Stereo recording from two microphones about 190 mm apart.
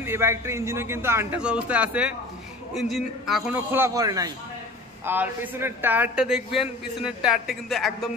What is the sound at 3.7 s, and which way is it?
A man's voice, 15° right (ahead or behind).